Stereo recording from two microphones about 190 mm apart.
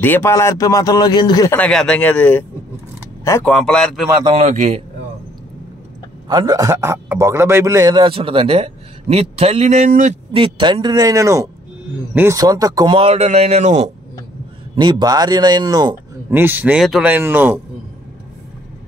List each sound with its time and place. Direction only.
0.0 s a man's voice: 10° left (ahead or behind)
3.4 s speech: 5° left (ahead or behind)
4.3 s a man's voice: 35° right (ahead or behind)
6.2 s a man's voice: 20° right (ahead or behind); by 10.1 s 40° right (ahead or behind)
10.3 s a man's voice: 25° right (ahead or behind)
14.8 s a man's voice: 25° right (ahead or behind)
16.3 s speech: 10° right (ahead or behind)